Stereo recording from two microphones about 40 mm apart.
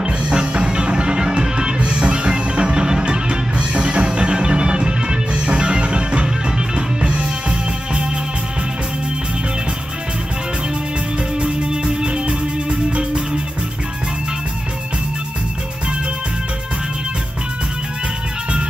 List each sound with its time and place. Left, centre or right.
0.0 s music: right
11.3 s music: right